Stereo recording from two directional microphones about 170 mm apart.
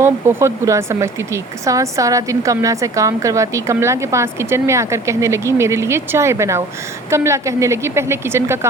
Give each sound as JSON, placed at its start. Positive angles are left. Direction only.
{"t": 0.0, "sound": "speech", "side_deg": -15}